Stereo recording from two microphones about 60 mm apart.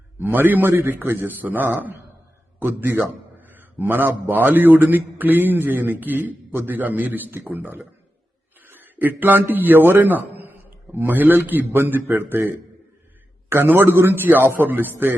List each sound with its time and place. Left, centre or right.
0.2 s a man's voice: right